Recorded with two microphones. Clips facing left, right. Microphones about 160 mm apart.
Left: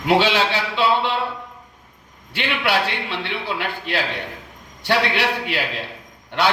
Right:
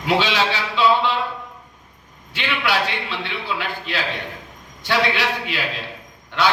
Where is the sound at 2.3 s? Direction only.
60° left (ahead or behind).